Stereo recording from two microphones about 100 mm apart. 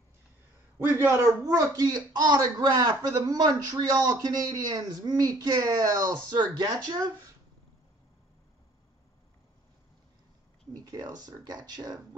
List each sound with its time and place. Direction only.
0.7 s a man's voice: 25° right (ahead or behind); by 7.0 s 45° right (ahead or behind)
10.7 s a man's voice: 40° right (ahead or behind)